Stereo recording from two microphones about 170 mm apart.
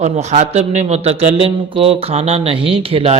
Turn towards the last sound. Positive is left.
turn(degrees=-35)  # may be behind; listen again after turning